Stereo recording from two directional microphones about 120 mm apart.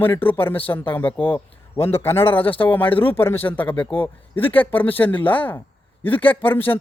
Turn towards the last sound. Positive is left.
turn(degrees=15)  # may be behind; listen again after turning